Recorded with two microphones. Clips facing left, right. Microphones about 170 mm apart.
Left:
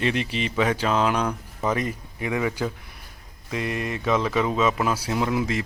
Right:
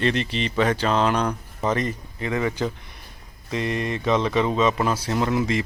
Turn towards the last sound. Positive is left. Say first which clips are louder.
# right 2 dB
turn(degrees=5)  # may be behind; listen again after turning